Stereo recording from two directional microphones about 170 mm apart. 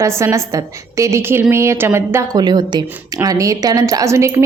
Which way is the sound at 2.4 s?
25° right (ahead or behind).